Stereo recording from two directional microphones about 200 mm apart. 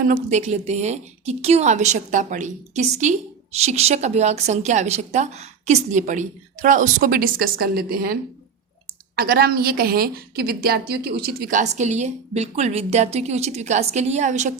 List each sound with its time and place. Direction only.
0.0 s a woman's voice: 40° right (ahead or behind)